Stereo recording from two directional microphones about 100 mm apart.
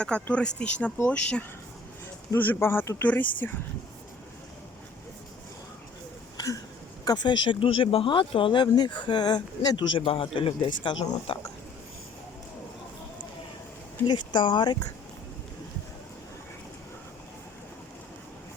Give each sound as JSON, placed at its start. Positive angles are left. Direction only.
{"t": 0.0, "sound": "speech", "side_deg": 10}
{"t": 3.0, "sound": "speech", "side_deg": 15}
{"t": 6.3, "sound": "a sound", "side_deg": 35}
{"t": 7.0, "sound": "speech", "side_deg": 45}
{"t": 14.1, "sound": "speech", "side_deg": 50}